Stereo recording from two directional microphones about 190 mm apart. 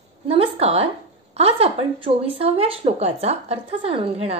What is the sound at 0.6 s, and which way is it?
Speech, 30° right (ahead or behind).